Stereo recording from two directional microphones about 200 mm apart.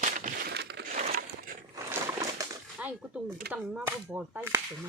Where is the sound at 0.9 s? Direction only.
40° right (ahead or behind).